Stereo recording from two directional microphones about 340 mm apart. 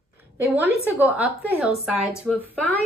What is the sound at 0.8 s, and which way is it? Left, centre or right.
Speech, centre.